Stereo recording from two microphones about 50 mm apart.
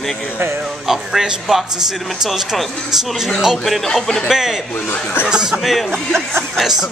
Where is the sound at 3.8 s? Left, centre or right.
Centre.